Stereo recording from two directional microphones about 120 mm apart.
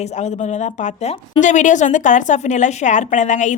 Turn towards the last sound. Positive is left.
turn(degrees=90)